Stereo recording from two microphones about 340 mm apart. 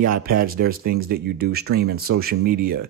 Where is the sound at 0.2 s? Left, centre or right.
Right.